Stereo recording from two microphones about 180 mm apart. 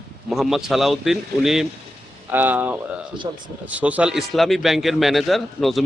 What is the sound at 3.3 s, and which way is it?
Speech, 25° right (ahead or behind).